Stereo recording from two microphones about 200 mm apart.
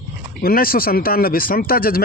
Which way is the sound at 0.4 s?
45° left (ahead or behind).